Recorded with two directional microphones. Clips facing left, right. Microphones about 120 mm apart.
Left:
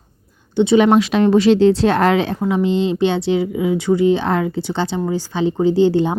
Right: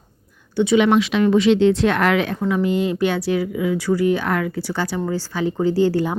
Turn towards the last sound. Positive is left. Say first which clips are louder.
# left 4 dB
turn(degrees=20)  # may be behind; listen again after turning